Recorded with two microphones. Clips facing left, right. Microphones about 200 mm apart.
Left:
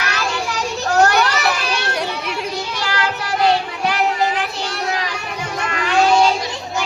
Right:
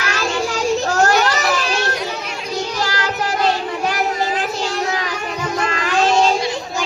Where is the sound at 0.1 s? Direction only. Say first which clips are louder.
Right 6 dB; 40° right (ahead or behind).